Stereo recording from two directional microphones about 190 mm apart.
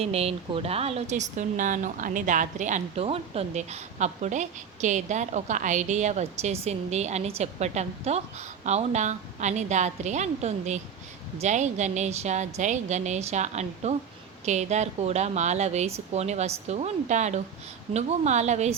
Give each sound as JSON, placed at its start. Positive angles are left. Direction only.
{"t": 0.0, "sound": "speech", "side_deg": -35}